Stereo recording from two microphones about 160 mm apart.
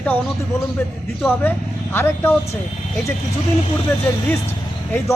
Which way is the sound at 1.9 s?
15° left (ahead or behind).